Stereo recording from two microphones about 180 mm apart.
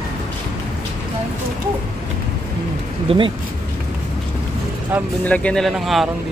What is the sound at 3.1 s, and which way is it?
Speech, 30° right (ahead or behind).